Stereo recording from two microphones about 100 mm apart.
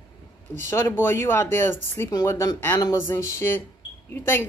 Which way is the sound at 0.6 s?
25° left (ahead or behind).